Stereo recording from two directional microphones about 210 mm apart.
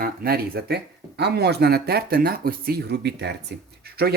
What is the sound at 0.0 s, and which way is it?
Speech, 45° right (ahead or behind).